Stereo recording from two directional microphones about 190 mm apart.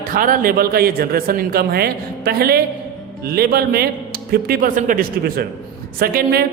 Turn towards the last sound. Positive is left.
turn(degrees=-55)  # may be behind; listen again after turning